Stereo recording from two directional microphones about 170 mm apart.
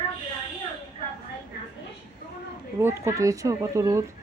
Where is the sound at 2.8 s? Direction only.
15° right (ahead or behind).